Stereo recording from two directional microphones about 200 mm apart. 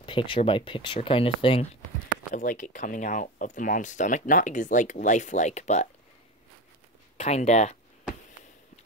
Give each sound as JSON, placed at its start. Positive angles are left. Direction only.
{"t": 0.0, "sound": "speech", "side_deg": 25}
{"t": 2.3, "sound": "speech", "side_deg": 40}
{"t": 7.2, "sound": "speech", "side_deg": 35}